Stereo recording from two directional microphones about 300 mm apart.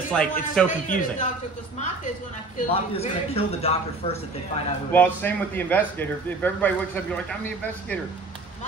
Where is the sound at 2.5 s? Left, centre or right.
Centre.